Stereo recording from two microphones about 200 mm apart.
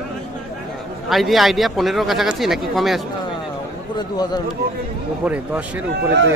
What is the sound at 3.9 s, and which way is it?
Speech, 20° left (ahead or behind).